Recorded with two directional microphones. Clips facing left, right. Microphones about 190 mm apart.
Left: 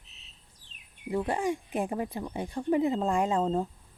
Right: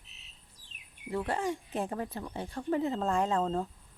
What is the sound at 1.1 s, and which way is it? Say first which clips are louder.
Speech: left 3 dB; 15° left (ahead or behind).